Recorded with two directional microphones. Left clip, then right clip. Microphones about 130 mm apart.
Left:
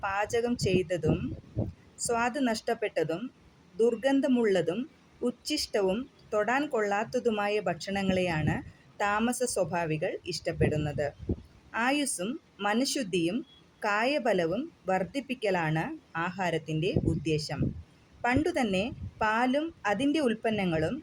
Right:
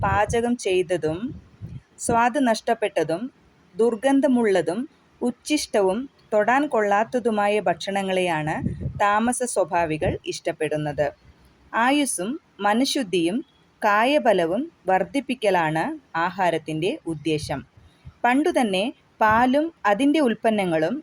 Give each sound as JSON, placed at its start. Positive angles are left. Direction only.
{"t": 0.0, "sound": "a woman's voice", "side_deg": -45}